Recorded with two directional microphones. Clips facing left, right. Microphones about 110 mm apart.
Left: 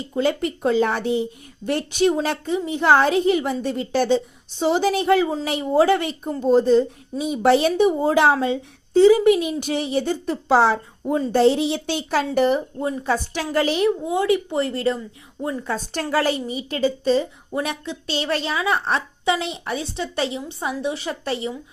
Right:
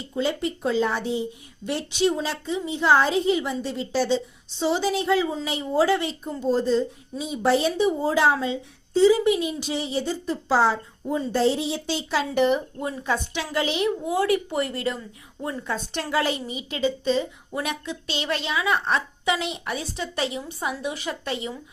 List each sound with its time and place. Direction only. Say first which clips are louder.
0.2 s speech: left 4 dB; 55° left (ahead or behind)
1.6 s speech: left 4 dB; 50° left (ahead or behind)
12.3 s a child's voice: left 1 dB; 40° left (ahead or behind)
14.0 s speech: left 2 dB; 25° left (ahead or behind)
15.4 s a woman's voice: left 4 dB; 15° left (ahead or behind)
15.6 s a child's voice: left 3 dB; 40° left (ahead or behind)